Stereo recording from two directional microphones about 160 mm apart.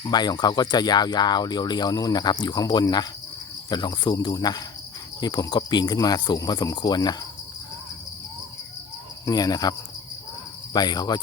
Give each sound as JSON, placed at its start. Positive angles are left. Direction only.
{"t": 0.0, "sound": "speech", "side_deg": 25}
{"t": 9.2, "sound": "speech", "side_deg": 25}